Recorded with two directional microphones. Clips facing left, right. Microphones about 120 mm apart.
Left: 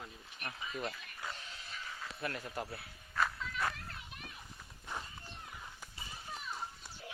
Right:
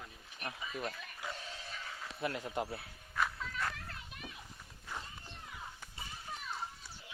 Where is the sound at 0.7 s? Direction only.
Centre (ahead or behind).